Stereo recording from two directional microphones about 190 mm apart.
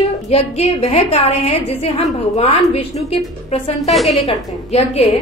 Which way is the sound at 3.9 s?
Centre (ahead or behind).